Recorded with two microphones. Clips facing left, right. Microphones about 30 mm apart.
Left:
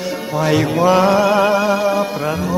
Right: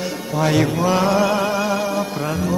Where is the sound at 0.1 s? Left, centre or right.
Centre.